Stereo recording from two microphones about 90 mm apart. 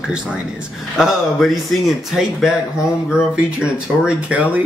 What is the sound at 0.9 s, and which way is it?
A man's voice, 5° right (ahead or behind).